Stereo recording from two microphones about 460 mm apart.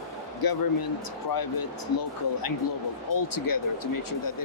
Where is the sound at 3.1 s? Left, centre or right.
Left.